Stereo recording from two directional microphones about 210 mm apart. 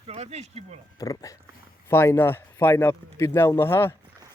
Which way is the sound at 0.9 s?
15° left (ahead or behind).